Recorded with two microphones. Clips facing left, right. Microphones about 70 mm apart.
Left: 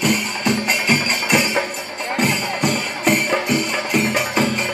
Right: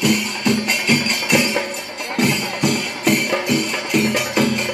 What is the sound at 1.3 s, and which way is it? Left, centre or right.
Music, centre.